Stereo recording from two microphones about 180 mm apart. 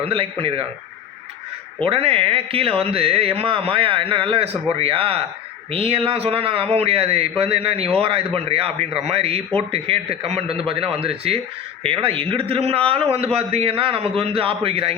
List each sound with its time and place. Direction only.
0.0 s speech: 30° right (ahead or behind)
1.8 s speech: 30° right (ahead or behind)